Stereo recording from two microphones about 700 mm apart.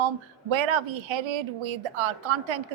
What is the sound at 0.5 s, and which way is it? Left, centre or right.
A woman's voice, right.